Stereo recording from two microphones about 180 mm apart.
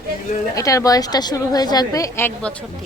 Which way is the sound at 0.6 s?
20° left (ahead or behind).